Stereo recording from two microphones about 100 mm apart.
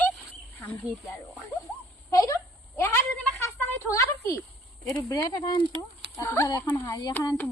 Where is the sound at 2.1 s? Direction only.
40° left (ahead or behind).